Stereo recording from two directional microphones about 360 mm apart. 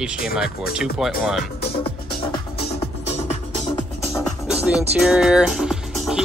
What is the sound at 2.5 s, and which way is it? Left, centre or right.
Music, left.